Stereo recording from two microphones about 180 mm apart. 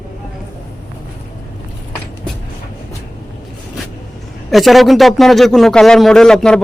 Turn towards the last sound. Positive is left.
turn(degrees=5)  # may be behind; listen again after turning